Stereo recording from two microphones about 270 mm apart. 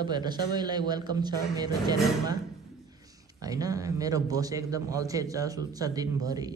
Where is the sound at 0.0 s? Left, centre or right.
Centre.